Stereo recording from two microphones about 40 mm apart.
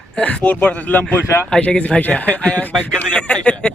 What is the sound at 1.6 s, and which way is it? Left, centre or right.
Speech, left.